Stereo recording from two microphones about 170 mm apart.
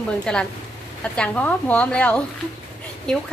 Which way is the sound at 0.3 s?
5° left (ahead or behind).